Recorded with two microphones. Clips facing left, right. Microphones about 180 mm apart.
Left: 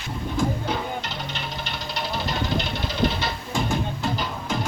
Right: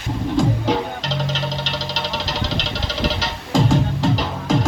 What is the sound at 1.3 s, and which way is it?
Music, 90° right.